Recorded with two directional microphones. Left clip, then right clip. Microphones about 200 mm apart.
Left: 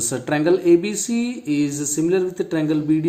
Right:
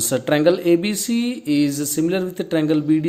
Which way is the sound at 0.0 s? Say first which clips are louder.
Right 4 dB; 35° right (ahead or behind).